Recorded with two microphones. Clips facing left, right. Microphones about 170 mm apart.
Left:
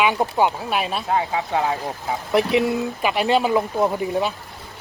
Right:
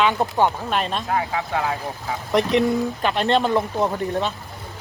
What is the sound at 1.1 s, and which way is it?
Speech, 20° left (ahead or behind).